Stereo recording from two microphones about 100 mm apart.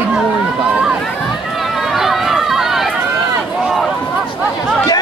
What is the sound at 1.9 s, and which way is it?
Run, 5° right (ahead or behind).